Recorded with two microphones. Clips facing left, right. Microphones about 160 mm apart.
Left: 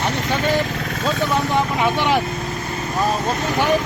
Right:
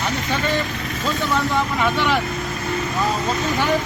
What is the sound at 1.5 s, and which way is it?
Speech, 20° left (ahead or behind).